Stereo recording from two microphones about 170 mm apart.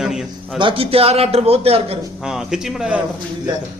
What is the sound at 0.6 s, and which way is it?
A man's voice, 30° right (ahead or behind).